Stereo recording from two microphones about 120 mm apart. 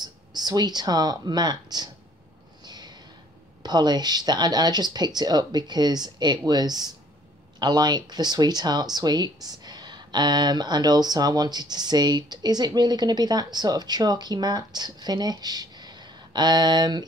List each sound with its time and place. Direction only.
0.0 s speech: 35° right (ahead or behind)
2.6 s a sound: 35° right (ahead or behind)
3.6 s speech: 35° right (ahead or behind)